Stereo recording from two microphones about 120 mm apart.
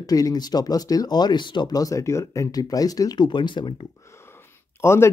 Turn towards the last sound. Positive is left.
turn(degrees=20)  # may be behind; listen again after turning